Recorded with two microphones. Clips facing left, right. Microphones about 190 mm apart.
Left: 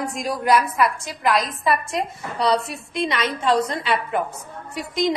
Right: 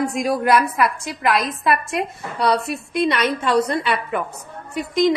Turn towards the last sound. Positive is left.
turn(degrees=-55)  # may be behind; listen again after turning